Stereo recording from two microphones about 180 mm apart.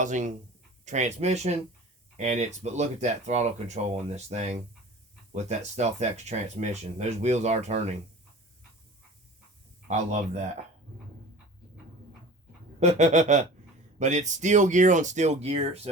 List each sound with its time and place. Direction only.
0.0 s speech: 45° right (ahead or behind)
9.9 s speech: 40° right (ahead or behind)
12.8 s speech: 40° right (ahead or behind)